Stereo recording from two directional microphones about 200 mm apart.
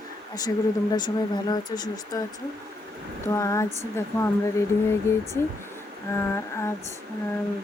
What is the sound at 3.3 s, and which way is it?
Speech, 15° left (ahead or behind).